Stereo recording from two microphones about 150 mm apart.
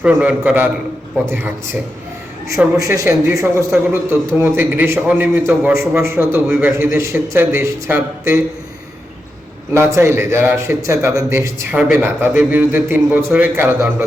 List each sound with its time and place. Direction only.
0.0 s a man's voice: 10° right (ahead or behind)
2.5 s a man's voice: 20° right (ahead or behind)
9.7 s a man's voice: 15° right (ahead or behind)